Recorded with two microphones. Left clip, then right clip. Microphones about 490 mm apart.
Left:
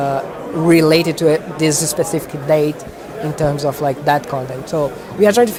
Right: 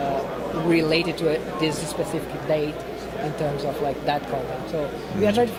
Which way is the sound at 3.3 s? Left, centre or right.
Left.